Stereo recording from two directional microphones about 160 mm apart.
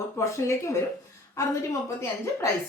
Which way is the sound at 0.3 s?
15° left (ahead or behind).